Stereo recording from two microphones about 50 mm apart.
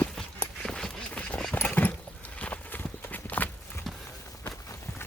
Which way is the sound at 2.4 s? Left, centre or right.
Left.